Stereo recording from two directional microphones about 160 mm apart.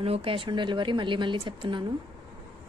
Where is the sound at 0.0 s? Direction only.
35° right (ahead or behind).